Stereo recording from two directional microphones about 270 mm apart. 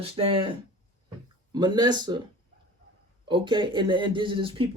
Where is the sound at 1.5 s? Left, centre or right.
Centre.